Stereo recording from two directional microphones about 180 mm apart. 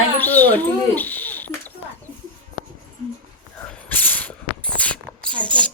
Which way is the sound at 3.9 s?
10° left (ahead or behind).